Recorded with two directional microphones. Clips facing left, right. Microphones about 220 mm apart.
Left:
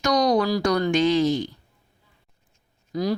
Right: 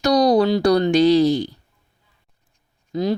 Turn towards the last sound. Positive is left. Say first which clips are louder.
# right 3 dB
turn(degrees=-25)  # may be behind; listen again after turning